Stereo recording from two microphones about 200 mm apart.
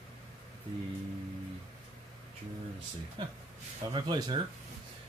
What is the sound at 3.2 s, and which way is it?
Speech, 25° right (ahead or behind).